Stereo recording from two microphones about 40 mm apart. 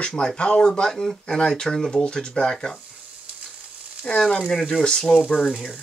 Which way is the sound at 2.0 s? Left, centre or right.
Left.